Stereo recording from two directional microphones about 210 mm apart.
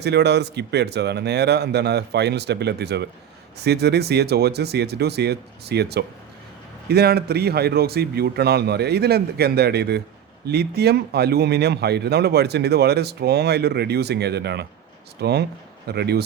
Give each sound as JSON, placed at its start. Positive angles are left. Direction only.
{"t": 0.0, "sound": "speech", "side_deg": -55}